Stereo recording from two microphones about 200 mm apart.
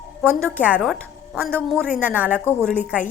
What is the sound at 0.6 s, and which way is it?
A woman's voice, 5° right (ahead or behind).